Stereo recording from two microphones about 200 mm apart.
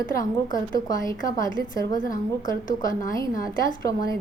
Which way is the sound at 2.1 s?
45° left (ahead or behind).